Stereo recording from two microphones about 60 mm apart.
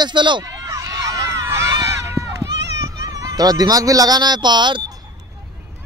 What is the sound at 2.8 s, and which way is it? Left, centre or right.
Honk, right.